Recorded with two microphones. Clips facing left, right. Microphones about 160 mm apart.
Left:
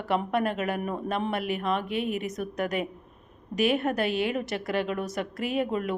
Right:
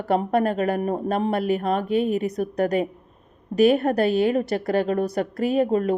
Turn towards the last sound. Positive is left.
turn(degrees=-40)  # may be behind; listen again after turning